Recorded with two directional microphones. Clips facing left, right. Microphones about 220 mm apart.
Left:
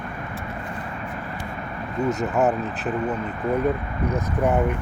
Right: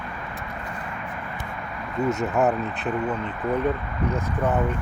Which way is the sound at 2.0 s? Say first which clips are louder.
Left 1 dB; centre (ahead or behind).